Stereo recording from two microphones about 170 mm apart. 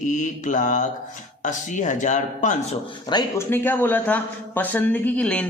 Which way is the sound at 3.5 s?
10° left (ahead or behind).